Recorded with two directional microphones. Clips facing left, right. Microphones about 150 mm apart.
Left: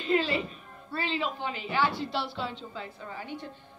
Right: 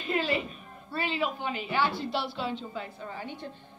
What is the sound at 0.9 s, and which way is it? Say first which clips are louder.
A woman's voice: right 1 dB; 15° right (ahead or behind).